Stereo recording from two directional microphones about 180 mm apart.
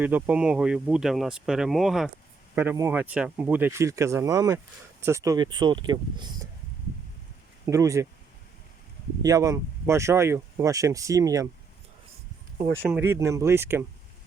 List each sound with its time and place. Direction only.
0.0 s speech: 10° right (ahead or behind)
2.6 s speech: 10° right (ahead or behind)
7.6 s speech: 20° right (ahead or behind)
9.2 s speech: 20° right (ahead or behind)
12.8 s speech: 10° right (ahead or behind)